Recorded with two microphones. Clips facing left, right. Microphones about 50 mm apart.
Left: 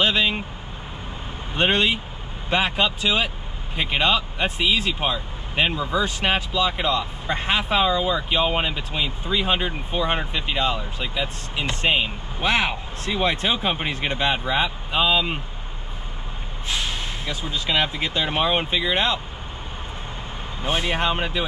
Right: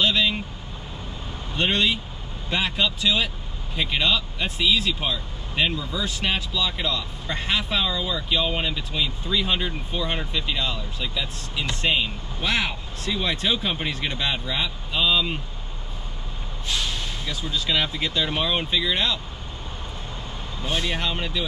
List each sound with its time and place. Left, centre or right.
0.0 s speech: left
1.5 s speech: left
16.6 s speech: left
20.6 s speech: left